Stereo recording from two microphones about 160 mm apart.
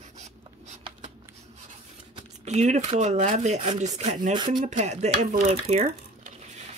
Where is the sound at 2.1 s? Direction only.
45° right (ahead or behind).